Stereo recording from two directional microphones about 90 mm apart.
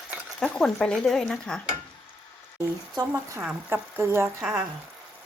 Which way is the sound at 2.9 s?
40° right (ahead or behind).